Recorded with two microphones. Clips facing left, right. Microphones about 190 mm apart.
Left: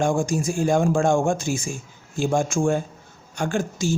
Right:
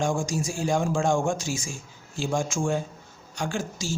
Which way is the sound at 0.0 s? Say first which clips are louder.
Left 5 dB; 55° left (ahead or behind).